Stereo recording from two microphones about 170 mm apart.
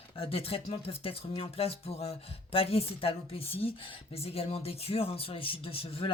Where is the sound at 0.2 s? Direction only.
35° left (ahead or behind).